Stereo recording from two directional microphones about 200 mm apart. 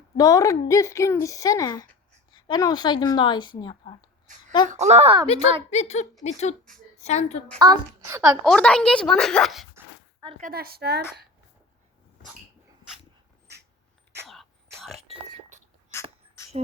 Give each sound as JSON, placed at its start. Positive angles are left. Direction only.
{"t": 0.2, "sound": "a woman's voice", "side_deg": 15}
{"t": 4.7, "sound": "speech", "side_deg": -35}
{"t": 5.7, "sound": "a woman's voice", "side_deg": 35}
{"t": 7.6, "sound": "a woman's voice", "side_deg": -20}
{"t": 8.4, "sound": "speech", "side_deg": 5}
{"t": 9.7, "sound": "a sound", "side_deg": -20}
{"t": 10.4, "sound": "speech", "side_deg": -50}
{"t": 14.3, "sound": "throat clearing", "side_deg": 0}
{"t": 15.9, "sound": "sneeze", "side_deg": 15}